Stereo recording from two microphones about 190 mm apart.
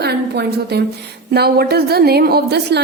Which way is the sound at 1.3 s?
55° right (ahead or behind).